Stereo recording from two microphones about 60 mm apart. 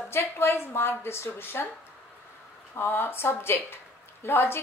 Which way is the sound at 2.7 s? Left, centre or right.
Left.